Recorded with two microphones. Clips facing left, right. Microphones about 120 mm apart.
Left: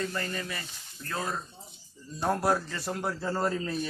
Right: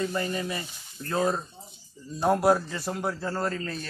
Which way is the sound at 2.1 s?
15° right (ahead or behind).